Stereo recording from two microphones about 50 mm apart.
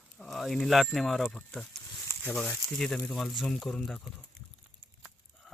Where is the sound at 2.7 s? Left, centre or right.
Centre.